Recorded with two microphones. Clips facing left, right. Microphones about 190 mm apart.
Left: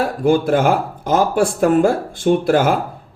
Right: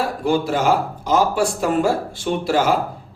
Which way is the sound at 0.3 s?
50° left (ahead or behind).